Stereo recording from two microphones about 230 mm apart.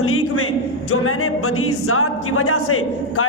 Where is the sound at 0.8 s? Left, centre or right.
Left.